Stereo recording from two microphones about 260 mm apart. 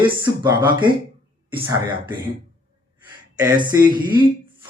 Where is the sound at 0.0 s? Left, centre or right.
Centre.